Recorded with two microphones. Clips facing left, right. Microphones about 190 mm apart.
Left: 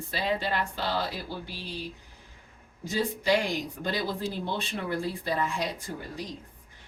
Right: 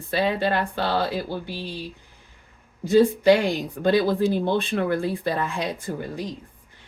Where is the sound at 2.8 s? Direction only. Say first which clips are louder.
Right 12 dB; 55° right (ahead or behind).